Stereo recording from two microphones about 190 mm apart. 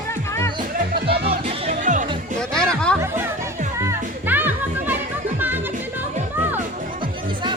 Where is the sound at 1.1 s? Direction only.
30° right (ahead or behind).